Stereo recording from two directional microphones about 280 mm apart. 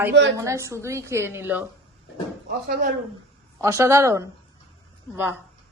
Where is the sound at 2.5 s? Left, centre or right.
Right.